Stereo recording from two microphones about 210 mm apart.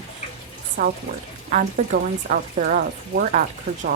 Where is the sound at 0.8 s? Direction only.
40° right (ahead or behind).